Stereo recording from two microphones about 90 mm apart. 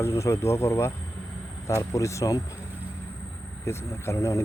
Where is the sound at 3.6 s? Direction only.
30° left (ahead or behind).